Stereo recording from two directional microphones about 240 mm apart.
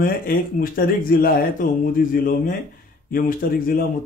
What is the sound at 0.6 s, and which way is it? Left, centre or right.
Speech, left.